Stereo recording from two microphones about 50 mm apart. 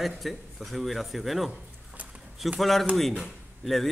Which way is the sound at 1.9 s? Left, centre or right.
Right.